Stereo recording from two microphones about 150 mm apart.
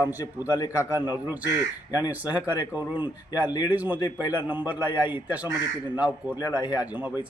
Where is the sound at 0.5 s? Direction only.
20° left (ahead or behind).